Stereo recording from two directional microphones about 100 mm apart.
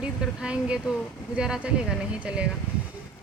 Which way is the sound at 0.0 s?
10° right (ahead or behind).